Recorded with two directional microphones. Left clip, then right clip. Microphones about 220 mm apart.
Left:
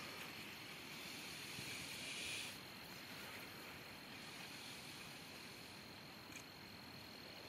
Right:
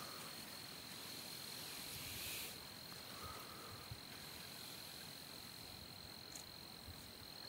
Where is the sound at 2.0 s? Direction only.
20° right (ahead or behind).